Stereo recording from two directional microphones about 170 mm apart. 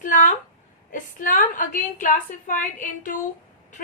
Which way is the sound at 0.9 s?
50° left (ahead or behind).